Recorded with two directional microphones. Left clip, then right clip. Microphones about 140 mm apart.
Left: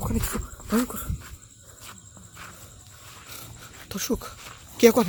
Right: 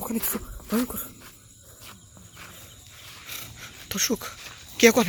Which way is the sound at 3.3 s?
5° left (ahead or behind).